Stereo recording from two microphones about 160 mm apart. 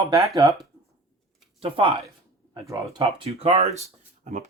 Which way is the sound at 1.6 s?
35° right (ahead or behind).